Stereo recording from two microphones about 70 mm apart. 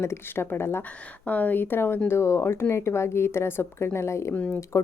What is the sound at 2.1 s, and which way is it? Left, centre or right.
A woman's voice, left.